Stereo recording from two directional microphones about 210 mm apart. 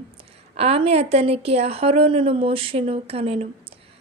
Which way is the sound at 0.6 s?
30° right (ahead or behind).